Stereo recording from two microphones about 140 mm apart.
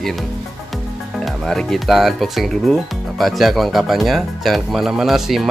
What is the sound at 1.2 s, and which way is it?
Speech, 5° left (ahead or behind).